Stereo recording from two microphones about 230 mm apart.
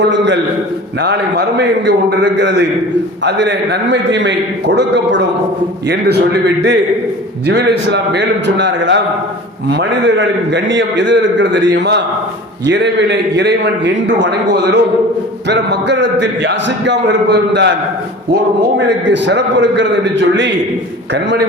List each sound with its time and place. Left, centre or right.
1.0 s a man's voice: right
5.9 s a man's voice: right
18.9 s a man's voice: right